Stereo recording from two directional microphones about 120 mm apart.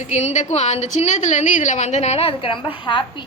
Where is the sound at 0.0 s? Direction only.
70° left (ahead or behind); by 3.2 s 40° left (ahead or behind).